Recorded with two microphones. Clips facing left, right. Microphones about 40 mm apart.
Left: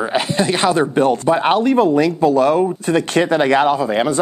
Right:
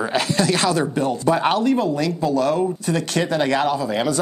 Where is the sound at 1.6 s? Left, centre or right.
Left.